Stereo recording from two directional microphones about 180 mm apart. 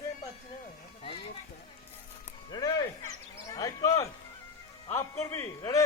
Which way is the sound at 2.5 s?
25° left (ahead or behind).